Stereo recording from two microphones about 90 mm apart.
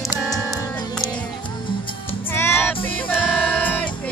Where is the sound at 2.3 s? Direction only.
25° left (ahead or behind).